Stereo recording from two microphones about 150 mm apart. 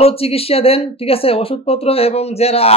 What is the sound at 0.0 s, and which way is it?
Speech, 40° left (ahead or behind).